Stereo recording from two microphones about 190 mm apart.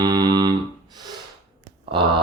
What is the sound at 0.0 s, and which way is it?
Music, 20° right (ahead or behind).